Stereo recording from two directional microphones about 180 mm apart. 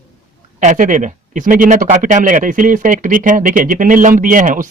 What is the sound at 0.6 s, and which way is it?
Speech, 45° right (ahead or behind).